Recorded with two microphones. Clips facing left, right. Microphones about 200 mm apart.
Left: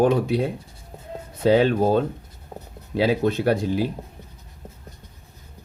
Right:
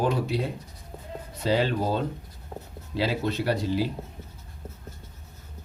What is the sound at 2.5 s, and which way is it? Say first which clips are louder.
Writing: left 1 dB; 10° left (ahead or behind).